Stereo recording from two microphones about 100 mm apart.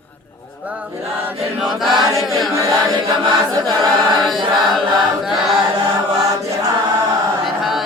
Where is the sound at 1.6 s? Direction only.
Centre (ahead or behind).